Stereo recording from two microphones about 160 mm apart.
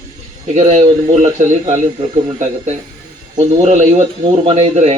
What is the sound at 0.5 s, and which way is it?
Speech, 45° right (ahead or behind).